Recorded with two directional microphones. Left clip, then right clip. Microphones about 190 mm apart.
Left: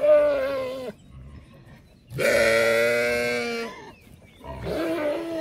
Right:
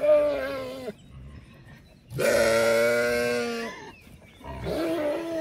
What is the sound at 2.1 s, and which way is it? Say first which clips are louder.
Sheep: left 2 dB; 15° right (ahead or behind).